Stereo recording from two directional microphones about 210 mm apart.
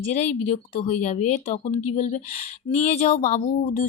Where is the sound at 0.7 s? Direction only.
35° left (ahead or behind).